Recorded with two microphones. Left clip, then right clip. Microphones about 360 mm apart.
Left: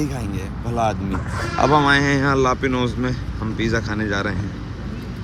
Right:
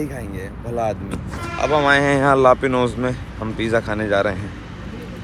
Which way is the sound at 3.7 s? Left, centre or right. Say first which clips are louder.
Right 6 dB; centre.